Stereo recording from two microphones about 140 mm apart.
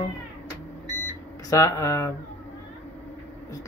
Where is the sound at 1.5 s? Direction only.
20° left (ahead or behind).